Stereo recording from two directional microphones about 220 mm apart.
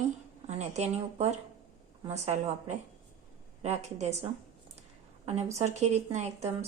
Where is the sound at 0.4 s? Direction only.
30° right (ahead or behind).